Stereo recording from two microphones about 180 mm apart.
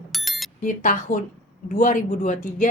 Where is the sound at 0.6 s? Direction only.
50° left (ahead or behind).